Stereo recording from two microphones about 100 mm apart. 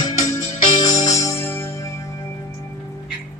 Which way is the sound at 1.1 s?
30° left (ahead or behind).